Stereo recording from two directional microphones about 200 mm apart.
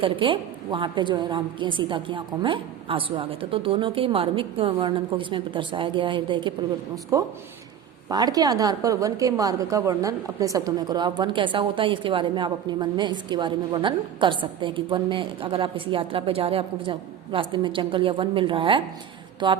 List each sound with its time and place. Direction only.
0.0 s a woman's voice: 25° right (ahead or behind)